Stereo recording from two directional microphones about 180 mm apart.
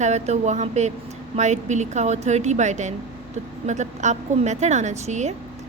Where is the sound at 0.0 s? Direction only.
40° right (ahead or behind).